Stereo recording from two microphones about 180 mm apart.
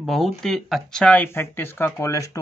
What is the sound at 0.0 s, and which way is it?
Speech, centre (ahead or behind).